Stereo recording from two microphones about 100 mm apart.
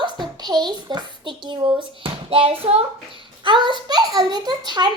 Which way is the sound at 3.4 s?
50° right (ahead or behind).